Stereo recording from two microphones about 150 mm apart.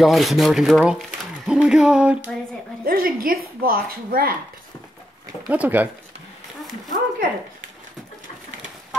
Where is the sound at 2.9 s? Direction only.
70° right (ahead or behind).